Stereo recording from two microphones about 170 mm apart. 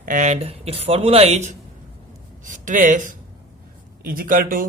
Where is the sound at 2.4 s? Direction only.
50° right (ahead or behind).